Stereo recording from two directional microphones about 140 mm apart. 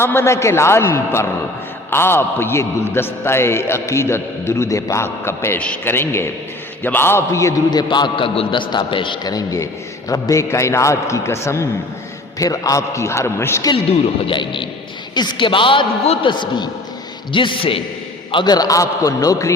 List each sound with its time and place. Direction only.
0.0 s a man's voice: 15° left (ahead or behind)
13.7 s a man's voice: 40° left (ahead or behind); by 19.5 s 25° left (ahead or behind)